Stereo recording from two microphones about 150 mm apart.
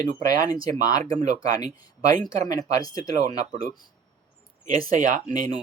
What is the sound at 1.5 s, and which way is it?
Speech, 25° left (ahead or behind).